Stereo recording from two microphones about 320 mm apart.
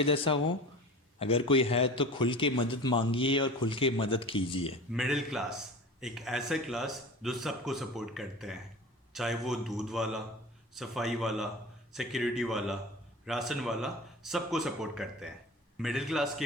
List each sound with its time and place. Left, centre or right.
0.0 s a man's voice: centre
4.9 s a man's voice: centre